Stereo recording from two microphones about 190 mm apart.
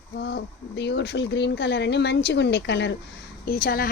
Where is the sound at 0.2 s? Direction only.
60° left (ahead or behind).